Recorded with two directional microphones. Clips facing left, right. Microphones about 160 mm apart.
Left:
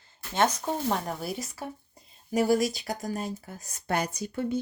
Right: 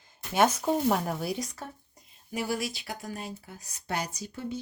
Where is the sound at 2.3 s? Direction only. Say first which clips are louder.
Left 8 dB; 40° left (ahead or behind).